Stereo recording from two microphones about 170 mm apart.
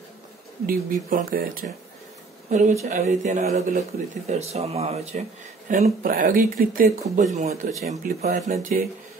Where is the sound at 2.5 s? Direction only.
45° right (ahead or behind).